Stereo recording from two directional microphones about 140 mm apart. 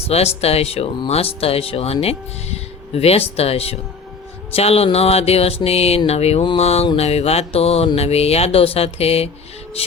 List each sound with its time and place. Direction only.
0.1 s speech: 45° left (ahead or behind)